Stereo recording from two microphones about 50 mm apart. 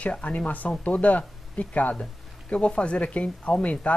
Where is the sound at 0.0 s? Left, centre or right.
Left.